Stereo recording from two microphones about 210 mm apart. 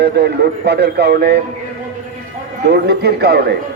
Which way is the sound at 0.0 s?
50° right (ahead or behind).